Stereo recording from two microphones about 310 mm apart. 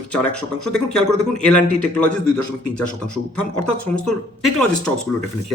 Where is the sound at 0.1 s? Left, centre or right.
Centre.